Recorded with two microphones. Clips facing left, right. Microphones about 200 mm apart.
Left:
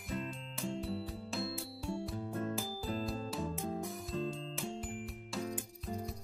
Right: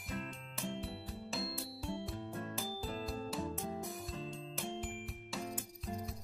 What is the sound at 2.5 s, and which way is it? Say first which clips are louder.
Music: left 3 dB; centre (ahead or behind).